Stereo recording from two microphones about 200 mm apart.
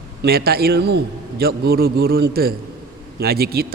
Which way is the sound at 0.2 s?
50° right (ahead or behind).